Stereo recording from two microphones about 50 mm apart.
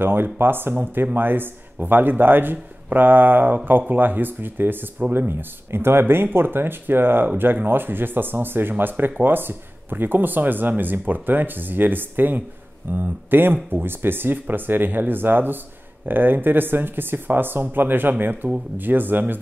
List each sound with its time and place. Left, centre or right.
0.0 s speech: right